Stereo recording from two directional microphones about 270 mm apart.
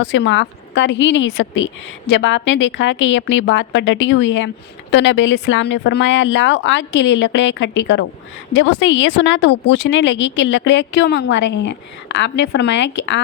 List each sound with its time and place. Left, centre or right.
0.0 s a woman's voice: left